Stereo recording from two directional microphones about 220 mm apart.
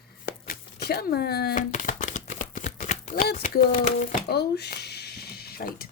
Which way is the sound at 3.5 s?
40° left (ahead or behind).